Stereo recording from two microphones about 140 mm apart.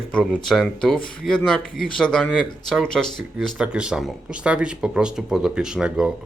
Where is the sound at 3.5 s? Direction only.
5° right (ahead or behind).